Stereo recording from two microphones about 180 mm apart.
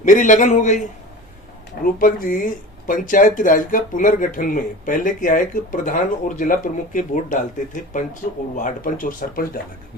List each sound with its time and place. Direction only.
0.0 s speech: 45° left (ahead or behind)
1.8 s speech: 50° left (ahead or behind)